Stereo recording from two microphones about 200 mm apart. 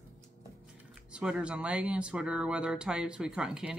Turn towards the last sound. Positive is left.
turn(degrees=-5)  # may be behind; listen again after turning